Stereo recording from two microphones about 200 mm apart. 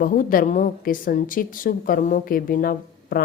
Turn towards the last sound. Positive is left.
turn(degrees=45)  # may be behind; listen again after turning